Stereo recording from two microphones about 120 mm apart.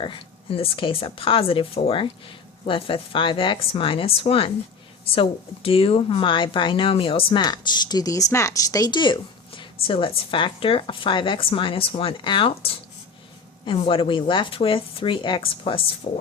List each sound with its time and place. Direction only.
0.0 s speech: 50° left (ahead or behind)
7.4 s speech: 35° left (ahead or behind)
16.1 s speech: 90° left